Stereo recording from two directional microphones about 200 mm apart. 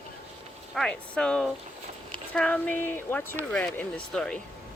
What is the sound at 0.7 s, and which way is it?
Speech, 5° left (ahead or behind).